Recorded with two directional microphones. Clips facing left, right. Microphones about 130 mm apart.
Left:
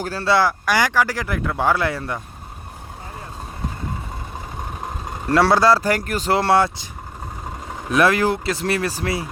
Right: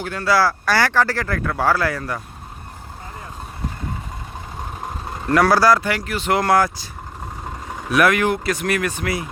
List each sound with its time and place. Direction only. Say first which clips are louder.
0.0 s speech: even; 30° left (ahead or behind)
5.3 s speech: even; 25° left (ahead or behind)
6.0 s speech: even; 45° left (ahead or behind); by 6.8 s 25° left (ahead or behind)
7.9 s speech: even; 30° left (ahead or behind)